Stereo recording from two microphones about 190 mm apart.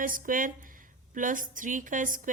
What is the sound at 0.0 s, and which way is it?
A woman's voice, 45° right (ahead or behind).